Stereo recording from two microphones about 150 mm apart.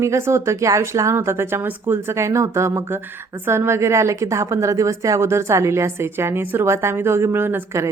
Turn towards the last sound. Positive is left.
turn(degrees=-15)  # may be behind; listen again after turning